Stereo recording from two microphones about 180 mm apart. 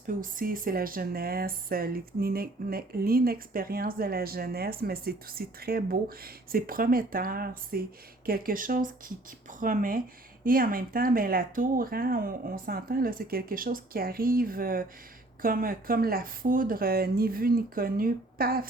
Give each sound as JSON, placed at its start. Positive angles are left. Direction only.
{"t": 0.1, "sound": "speech", "side_deg": -50}